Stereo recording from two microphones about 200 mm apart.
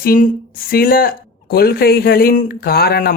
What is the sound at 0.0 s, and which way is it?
Speech, 45° left (ahead or behind).